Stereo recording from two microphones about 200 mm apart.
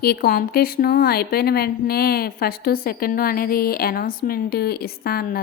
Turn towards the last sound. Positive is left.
turn(degrees=50)  # may be behind; listen again after turning